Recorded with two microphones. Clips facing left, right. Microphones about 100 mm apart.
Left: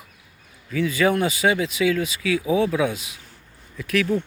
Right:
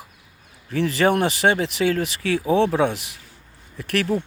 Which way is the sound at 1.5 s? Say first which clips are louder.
Even; 30° right (ahead or behind).